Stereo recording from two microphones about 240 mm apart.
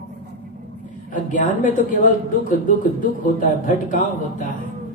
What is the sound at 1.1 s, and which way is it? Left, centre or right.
A man's voice, left.